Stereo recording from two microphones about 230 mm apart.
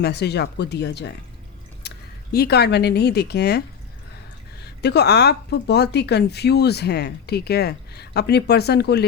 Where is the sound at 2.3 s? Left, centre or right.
Left.